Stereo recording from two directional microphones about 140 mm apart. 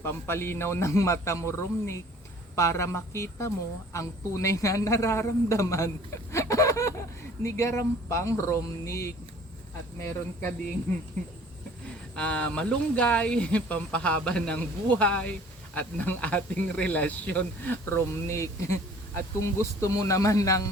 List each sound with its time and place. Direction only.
0.0 s a woman's voice: 15° left (ahead or behind)
6.3 s a sound: 20° left (ahead or behind)
7.4 s a woman's voice: 20° left (ahead or behind)
12.1 s speech: 5° left (ahead or behind); by 20.7 s 25° left (ahead or behind)